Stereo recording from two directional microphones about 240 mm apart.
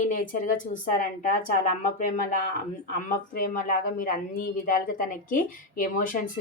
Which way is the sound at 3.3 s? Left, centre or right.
Left.